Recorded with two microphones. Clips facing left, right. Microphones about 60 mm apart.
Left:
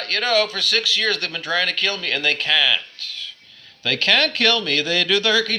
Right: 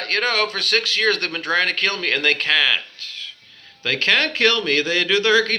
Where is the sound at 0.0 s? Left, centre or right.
Right.